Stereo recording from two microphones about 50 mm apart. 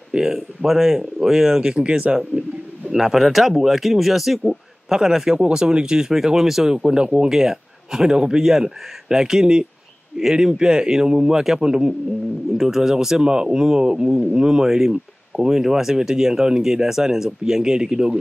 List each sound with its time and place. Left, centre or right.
0.1 s speech: centre
1.7 s a man's voice: centre
2.9 s speech: centre